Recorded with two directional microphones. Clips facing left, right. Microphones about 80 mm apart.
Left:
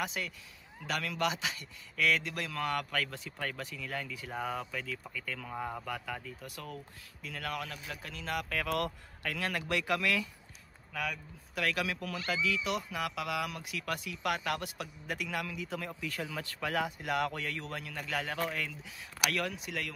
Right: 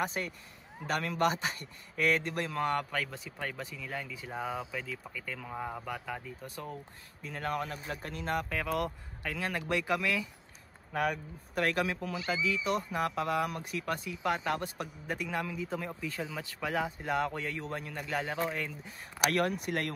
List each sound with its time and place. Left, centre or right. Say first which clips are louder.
0.0 s a man's voice: right 3 dB; right
2.9 s speech: even; centre
4.3 s speech: right 1 dB; centre
6.4 s a man's voice: right 2 dB; right
8.5 s speech: right 1 dB; centre
10.9 s a man's voice: right 6 dB; right
12.3 s a man's voice: right 1 dB; centre
12.7 s a man's voice: right 4 dB; right
19.2 s speech: right 5 dB; right